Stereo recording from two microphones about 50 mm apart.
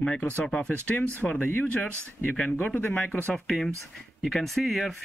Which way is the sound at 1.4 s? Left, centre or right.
Left.